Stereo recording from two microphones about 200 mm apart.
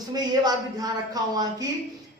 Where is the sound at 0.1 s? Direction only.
20° right (ahead or behind).